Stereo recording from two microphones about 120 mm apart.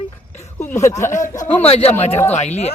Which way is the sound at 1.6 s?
60° left (ahead or behind).